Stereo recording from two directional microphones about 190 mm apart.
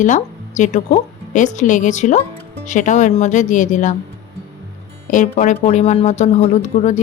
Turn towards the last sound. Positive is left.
turn(degrees=40)  # may be behind; listen again after turning